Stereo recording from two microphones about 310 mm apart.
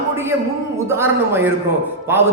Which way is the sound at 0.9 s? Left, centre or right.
Centre.